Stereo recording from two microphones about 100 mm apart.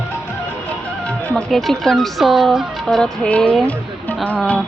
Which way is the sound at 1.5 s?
Centre (ahead or behind).